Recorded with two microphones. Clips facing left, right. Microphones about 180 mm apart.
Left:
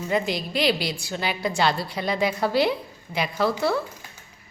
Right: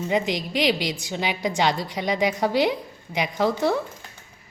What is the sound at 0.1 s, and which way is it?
A woman's voice, 15° right (ahead or behind).